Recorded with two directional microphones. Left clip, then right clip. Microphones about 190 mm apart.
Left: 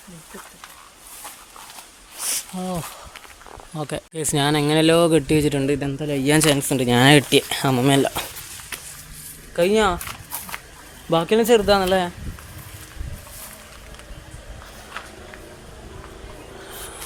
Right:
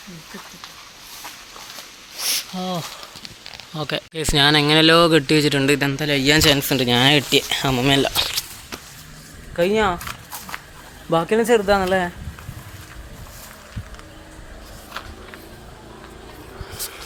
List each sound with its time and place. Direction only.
2.6 s speech: 10° left (ahead or behind)
9.6 s speech: 15° left (ahead or behind)
11.1 s speech: 10° left (ahead or behind)
15.0 s a sound: 30° right (ahead or behind)